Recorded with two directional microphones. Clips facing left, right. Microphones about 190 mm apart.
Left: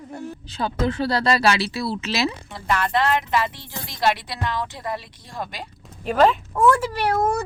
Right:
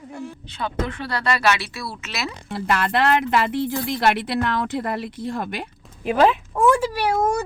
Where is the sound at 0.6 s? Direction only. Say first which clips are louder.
Left 4 dB; 35° left (ahead or behind).